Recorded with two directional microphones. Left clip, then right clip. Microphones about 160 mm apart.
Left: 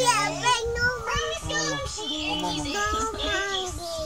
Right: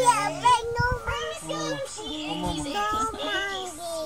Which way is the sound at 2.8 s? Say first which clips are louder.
Right 1 dB; 15° left (ahead or behind).